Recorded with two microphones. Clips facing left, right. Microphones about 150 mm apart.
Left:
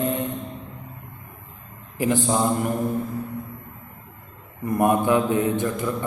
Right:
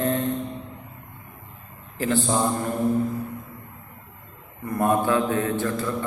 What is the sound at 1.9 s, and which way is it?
Speech, 15° left (ahead or behind).